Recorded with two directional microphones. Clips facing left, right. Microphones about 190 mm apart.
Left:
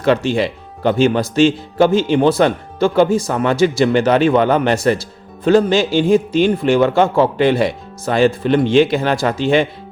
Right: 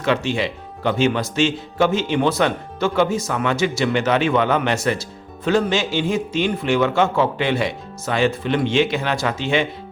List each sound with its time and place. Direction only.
0.0 s speech: 40° left (ahead or behind)